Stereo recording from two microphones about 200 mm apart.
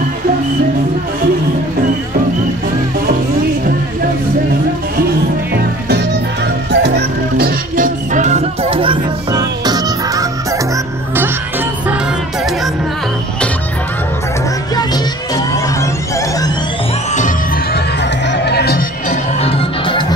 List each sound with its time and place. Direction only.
5.5 s music: 55° right (ahead or behind); by 10.2 s 20° right (ahead or behind)
18.3 s music: 55° left (ahead or behind)
19.4 s music: 25° left (ahead or behind)